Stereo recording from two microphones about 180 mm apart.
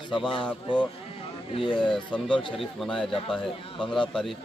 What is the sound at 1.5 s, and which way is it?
Speech, 30° left (ahead or behind).